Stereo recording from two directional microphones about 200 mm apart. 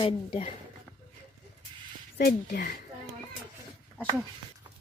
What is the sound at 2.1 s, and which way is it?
Speech, 50° left (ahead or behind).